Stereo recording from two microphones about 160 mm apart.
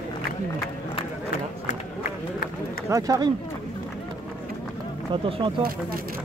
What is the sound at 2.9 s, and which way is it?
Speech, 20° right (ahead or behind).